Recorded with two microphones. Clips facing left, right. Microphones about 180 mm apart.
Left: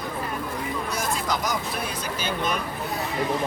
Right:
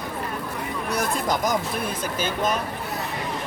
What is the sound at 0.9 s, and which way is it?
Vehicle, 60° right (ahead or behind).